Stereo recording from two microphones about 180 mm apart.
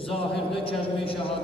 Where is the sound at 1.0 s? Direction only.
30° left (ahead or behind).